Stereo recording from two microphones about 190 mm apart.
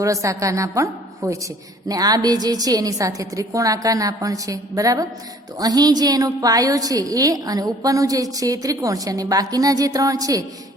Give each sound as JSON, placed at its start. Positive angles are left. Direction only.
{"t": 0.0, "sound": "a woman's voice", "side_deg": -15}